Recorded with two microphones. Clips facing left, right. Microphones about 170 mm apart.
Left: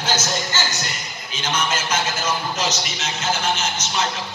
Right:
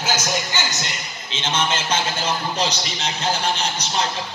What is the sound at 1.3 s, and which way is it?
A man's voice, 25° right (ahead or behind).